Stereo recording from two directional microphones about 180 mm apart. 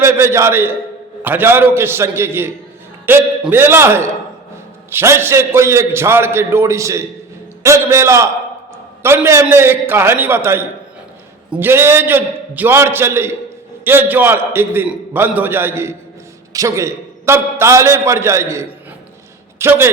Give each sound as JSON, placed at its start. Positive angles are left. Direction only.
{"t": 0.0, "sound": "a man's voice", "side_deg": -15}